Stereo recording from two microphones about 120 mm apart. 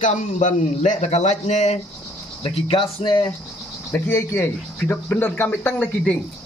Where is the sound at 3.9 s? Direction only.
20° left (ahead or behind).